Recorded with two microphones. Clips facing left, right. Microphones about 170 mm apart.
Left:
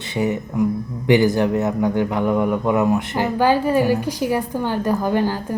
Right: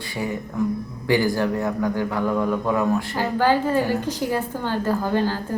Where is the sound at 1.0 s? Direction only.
20° left (ahead or behind).